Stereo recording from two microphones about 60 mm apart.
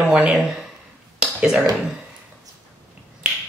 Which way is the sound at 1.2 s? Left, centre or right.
Centre.